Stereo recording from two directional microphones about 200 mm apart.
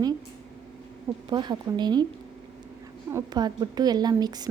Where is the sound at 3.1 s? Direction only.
20° right (ahead or behind).